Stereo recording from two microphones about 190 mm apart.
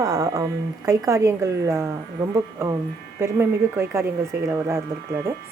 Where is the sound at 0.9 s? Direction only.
15° right (ahead or behind).